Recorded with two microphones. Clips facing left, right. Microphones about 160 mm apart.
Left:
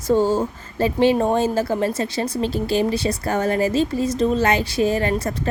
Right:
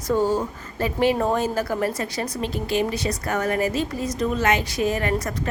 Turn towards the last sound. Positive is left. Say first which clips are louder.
# left 3 dB
turn(degrees=30)  # may be behind; listen again after turning